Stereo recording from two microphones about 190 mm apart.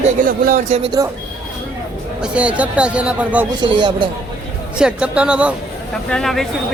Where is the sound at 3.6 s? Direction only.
25° right (ahead or behind).